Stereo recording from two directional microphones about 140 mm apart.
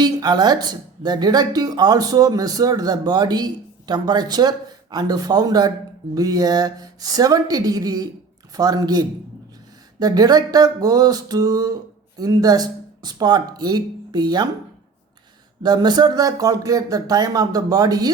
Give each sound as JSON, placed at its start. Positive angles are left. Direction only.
{"t": 0.0, "sound": "speech", "side_deg": -30}
{"t": 15.6, "sound": "speech", "side_deg": -30}